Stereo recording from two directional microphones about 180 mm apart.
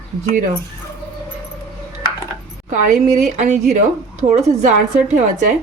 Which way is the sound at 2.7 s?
40° right (ahead or behind).